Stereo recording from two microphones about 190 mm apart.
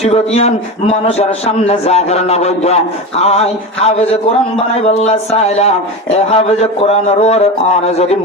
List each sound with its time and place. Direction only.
0.0 s a man's voice: 35° left (ahead or behind)